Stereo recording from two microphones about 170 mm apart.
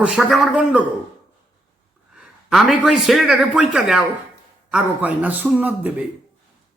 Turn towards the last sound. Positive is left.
turn(degrees=-10)  # may be behind; listen again after turning